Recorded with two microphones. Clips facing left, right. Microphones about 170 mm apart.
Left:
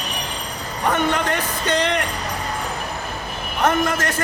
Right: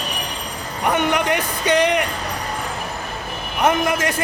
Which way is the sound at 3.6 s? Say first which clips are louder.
Right 1 dB; 10° right (ahead or behind).